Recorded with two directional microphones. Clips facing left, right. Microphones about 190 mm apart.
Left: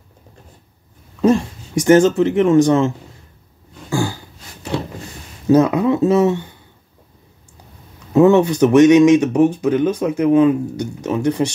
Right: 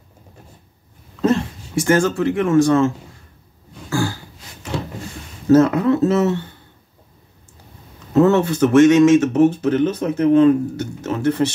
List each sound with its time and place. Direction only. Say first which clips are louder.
1.2 s speech: left 3 dB; 15° left (ahead or behind)
3.9 s a sound: left 1 dB; 15° left (ahead or behind)
5.5 s speech: even; 15° left (ahead or behind)
8.1 s speech: left 3 dB; 15° left (ahead or behind)